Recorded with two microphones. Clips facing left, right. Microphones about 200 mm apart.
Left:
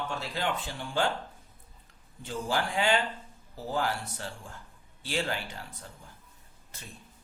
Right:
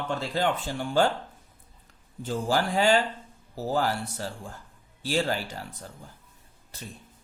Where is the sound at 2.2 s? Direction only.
40° right (ahead or behind).